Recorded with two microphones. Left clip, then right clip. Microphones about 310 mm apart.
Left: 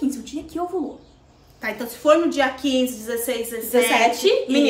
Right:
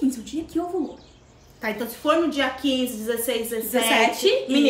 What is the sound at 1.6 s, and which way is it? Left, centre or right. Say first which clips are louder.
A woman's voice: left 4 dB; centre.